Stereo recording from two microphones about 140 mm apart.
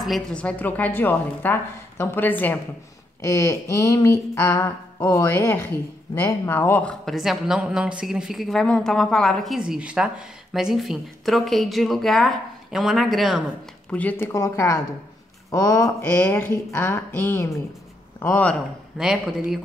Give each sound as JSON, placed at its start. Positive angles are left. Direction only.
{"t": 0.0, "sound": "a woman's voice", "side_deg": 5}
{"t": 7.2, "sound": "a woman's voice", "side_deg": -5}
{"t": 13.8, "sound": "a woman's voice", "side_deg": 10}
{"t": 16.0, "sound": "a woman's voice", "side_deg": 10}
{"t": 18.9, "sound": "a woman's voice", "side_deg": -5}